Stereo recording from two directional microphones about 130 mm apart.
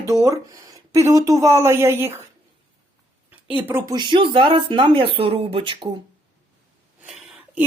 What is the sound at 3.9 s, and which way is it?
Speech, 35° right (ahead or behind).